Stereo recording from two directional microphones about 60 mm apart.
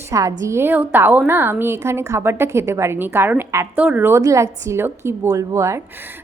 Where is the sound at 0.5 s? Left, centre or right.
Right.